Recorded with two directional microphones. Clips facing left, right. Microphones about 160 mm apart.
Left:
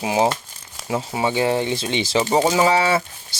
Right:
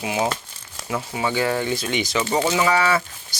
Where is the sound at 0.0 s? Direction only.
30° left (ahead or behind).